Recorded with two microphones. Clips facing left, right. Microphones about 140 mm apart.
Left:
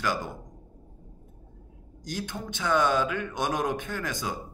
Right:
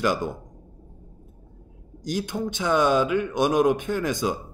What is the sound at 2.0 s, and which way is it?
Speech, 15° right (ahead or behind).